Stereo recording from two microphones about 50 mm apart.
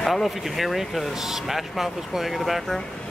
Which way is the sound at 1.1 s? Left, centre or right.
Centre.